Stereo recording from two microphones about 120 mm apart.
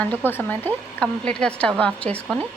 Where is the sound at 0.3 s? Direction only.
15° left (ahead or behind).